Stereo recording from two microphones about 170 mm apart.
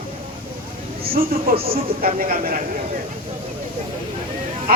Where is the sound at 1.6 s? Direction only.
35° right (ahead or behind).